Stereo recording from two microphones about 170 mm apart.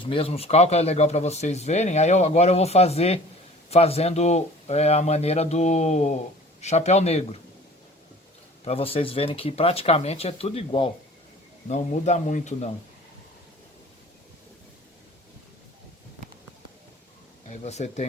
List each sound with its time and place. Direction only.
0.0 s speech: 30° left (ahead or behind)
8.6 s speech: 35° left (ahead or behind)
17.5 s speech: 40° left (ahead or behind)